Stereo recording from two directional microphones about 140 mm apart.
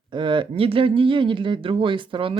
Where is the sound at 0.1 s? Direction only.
35° right (ahead or behind).